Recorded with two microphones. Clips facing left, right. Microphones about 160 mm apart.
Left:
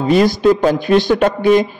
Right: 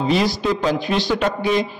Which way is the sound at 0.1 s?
50° left (ahead or behind).